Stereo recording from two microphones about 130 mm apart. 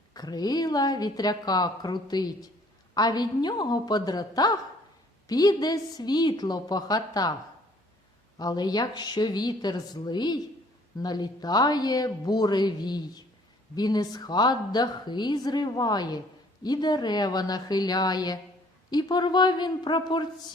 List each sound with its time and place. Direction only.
0.1 s a woman's voice: 30° left (ahead or behind)
8.4 s a woman's voice: 30° left (ahead or behind)